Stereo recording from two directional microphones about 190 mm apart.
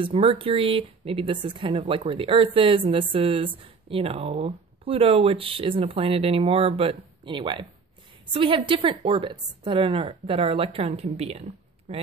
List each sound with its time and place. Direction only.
0.0 s speech: 30° right (ahead or behind)